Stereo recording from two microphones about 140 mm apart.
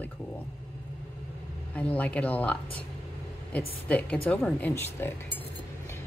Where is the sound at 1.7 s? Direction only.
10° left (ahead or behind).